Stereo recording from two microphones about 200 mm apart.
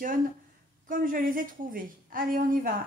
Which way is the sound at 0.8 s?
45° right (ahead or behind).